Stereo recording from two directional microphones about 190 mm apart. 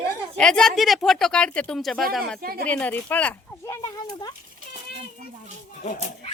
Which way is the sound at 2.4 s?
50° right (ahead or behind).